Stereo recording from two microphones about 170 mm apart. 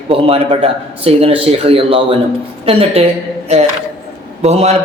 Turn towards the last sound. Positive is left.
turn(degrees=-40)  # may be behind; listen again after turning